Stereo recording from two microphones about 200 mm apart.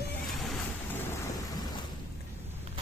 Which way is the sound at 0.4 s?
Centre (ahead or behind).